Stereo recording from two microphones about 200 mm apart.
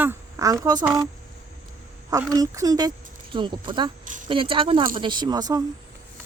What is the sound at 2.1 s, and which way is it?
A woman's voice, 15° right (ahead or behind).